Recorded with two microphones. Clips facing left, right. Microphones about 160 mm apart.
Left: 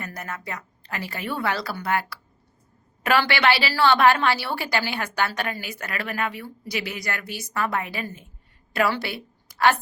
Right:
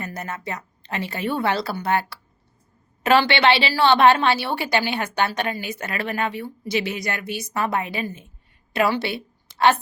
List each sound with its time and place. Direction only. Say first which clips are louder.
0.0 s a woman's voice: right 3 dB; 25° right (ahead or behind)